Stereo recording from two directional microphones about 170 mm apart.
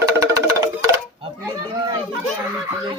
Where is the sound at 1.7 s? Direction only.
20° right (ahead or behind).